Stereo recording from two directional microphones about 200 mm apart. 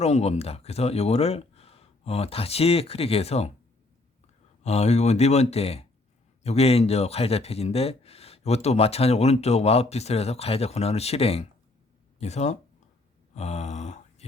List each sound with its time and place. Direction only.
0.0 s speech: 30° left (ahead or behind)
4.6 s speech: 35° left (ahead or behind)
13.3 s a sound: 35° left (ahead or behind)